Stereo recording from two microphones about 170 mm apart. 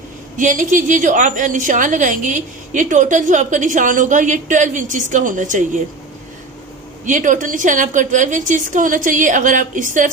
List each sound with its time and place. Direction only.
0.4 s a woman's voice: 50° right (ahead or behind)
7.1 s a woman's voice: 50° right (ahead or behind)